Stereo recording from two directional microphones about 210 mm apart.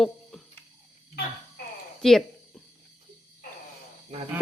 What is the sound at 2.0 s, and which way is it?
Cricket, centre (ahead or behind).